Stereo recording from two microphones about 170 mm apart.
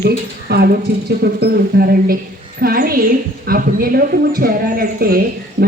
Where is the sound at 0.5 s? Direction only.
75° right (ahead or behind).